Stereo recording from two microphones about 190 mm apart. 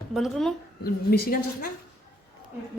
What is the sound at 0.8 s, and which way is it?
Speech, 55° left (ahead or behind).